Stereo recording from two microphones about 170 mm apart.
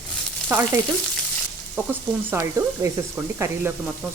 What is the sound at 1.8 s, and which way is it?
Speech, 10° right (ahead or behind).